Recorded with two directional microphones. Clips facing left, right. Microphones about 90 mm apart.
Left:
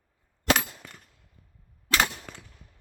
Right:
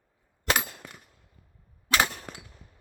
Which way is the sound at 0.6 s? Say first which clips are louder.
Even; 5° right (ahead or behind).